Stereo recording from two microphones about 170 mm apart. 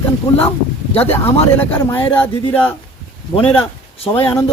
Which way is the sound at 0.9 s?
35° left (ahead or behind).